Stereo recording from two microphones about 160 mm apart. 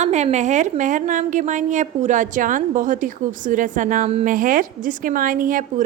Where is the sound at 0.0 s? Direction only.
45° right (ahead or behind).